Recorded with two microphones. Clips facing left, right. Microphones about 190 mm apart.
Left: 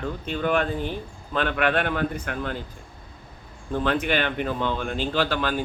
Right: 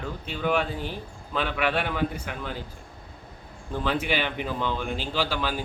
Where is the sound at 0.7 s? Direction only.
50° left (ahead or behind).